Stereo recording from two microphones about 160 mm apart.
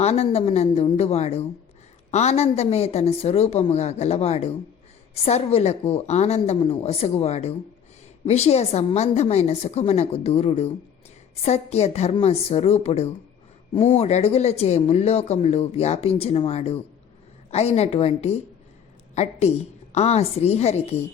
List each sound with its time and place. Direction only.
0.0 s a woman's voice: 40° left (ahead or behind)